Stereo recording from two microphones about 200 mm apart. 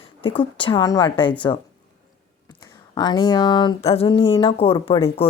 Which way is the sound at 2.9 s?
20° left (ahead or behind).